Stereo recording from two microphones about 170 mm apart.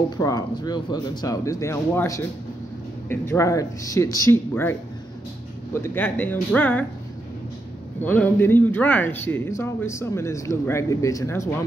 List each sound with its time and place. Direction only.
0.2 s speech: 20° left (ahead or behind)
8.0 s speech: 10° left (ahead or behind)